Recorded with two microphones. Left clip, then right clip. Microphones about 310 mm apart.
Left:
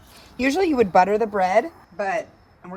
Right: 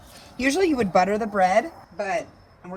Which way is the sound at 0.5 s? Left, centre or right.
Left.